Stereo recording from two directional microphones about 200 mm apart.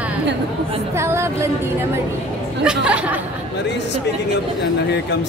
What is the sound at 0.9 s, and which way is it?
Speech, 15° right (ahead or behind).